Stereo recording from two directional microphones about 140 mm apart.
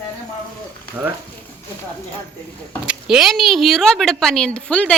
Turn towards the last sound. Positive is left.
turn(degrees=10)  # may be behind; listen again after turning